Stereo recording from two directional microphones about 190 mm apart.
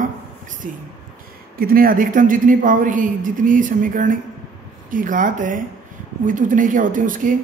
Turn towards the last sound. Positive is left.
turn(degrees=-45)  # may be behind; listen again after turning